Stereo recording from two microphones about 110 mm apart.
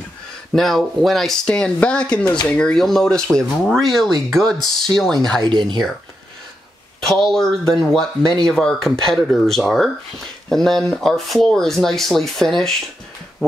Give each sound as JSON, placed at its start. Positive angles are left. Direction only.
{"t": 0.5, "sound": "speech", "side_deg": 0}
{"t": 5.4, "sound": "speech", "side_deg": -45}
{"t": 7.1, "sound": "speech", "side_deg": 0}